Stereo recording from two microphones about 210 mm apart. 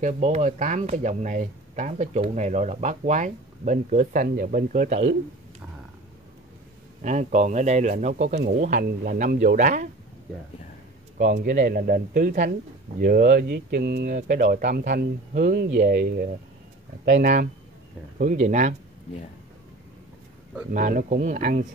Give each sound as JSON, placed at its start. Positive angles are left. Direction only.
{"t": 0.0, "sound": "speech", "side_deg": -35}
{"t": 7.0, "sound": "speech", "side_deg": -35}
{"t": 11.1, "sound": "speech", "side_deg": -40}
{"t": 20.7, "sound": "speech", "side_deg": -40}